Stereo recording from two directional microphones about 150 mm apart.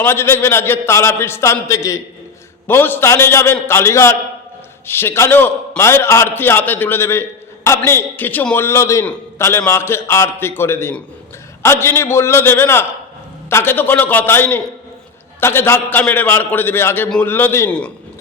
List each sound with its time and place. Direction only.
0.0 s a man's voice: 15° left (ahead or behind)